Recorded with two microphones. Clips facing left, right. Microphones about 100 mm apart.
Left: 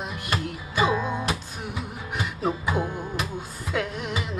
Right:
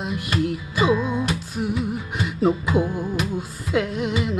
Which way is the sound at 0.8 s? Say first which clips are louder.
Right 4 dB; 40° left (ahead or behind).